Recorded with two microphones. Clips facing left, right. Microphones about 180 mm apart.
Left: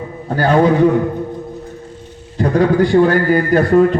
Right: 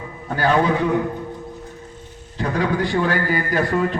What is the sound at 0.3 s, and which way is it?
Speech, 40° left (ahead or behind).